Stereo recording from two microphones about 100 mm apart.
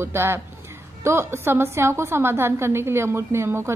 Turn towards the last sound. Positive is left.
turn(degrees=-25)  # may be behind; listen again after turning